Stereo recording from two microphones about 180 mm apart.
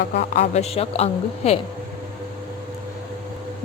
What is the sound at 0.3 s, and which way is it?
A woman's voice, 35° left (ahead or behind).